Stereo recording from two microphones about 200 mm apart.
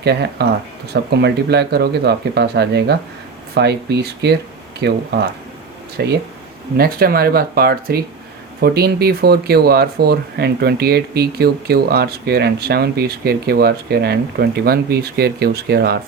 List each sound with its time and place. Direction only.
0.0 s speech: 55° right (ahead or behind)
6.7 s speech: 50° right (ahead or behind)